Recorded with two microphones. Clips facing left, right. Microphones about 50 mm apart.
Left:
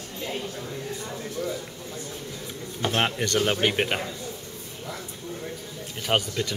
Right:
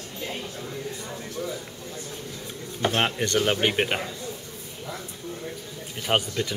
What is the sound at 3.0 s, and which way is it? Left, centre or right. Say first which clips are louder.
Speech: left 1 dB; centre.